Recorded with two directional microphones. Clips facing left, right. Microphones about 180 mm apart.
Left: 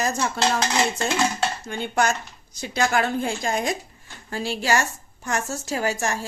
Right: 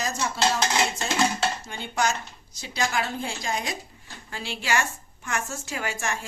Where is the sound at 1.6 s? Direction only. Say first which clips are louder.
Left 4 dB; 55° left (ahead or behind).